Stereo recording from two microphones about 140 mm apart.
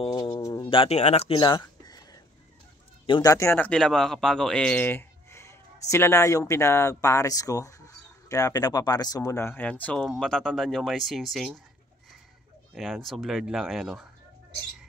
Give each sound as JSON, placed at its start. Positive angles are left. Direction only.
{"t": 0.0, "sound": "bird", "side_deg": 30}
{"t": 0.7, "sound": "speech", "side_deg": 45}
{"t": 1.3, "sound": "a sound", "side_deg": 35}
{"t": 3.1, "sound": "speech", "side_deg": 25}
{"t": 3.5, "sound": "speech", "side_deg": 10}
{"t": 12.7, "sound": "speech", "side_deg": 0}